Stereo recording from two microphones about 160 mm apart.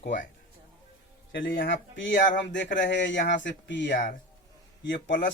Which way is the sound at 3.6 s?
90° left.